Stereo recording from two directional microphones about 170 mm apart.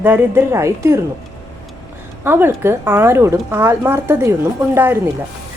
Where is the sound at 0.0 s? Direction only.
10° right (ahead or behind).